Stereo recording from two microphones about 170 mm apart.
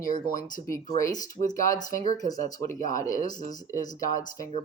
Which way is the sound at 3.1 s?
50° left (ahead or behind).